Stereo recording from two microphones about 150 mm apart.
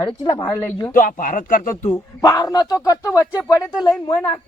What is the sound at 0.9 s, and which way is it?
Speech, 60° left (ahead or behind).